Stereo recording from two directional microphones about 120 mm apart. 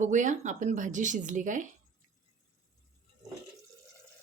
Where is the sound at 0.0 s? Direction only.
90° right.